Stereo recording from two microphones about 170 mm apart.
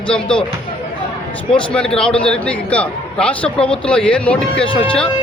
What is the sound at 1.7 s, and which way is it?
A man's voice, 5° left (ahead or behind).